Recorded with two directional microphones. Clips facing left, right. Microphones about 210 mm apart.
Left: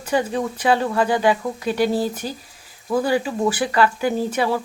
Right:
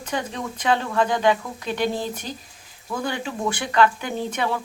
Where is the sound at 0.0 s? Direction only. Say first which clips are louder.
Left 7 dB; 10° left (ahead or behind).